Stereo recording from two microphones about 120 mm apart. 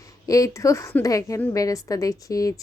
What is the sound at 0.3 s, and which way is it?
A woman's voice, 30° left (ahead or behind).